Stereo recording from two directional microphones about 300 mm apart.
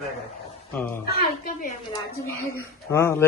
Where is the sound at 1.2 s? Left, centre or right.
Left.